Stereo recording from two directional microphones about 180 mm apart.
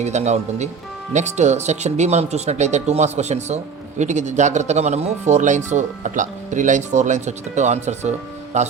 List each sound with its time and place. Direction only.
0.0 s speech: 40° right (ahead or behind)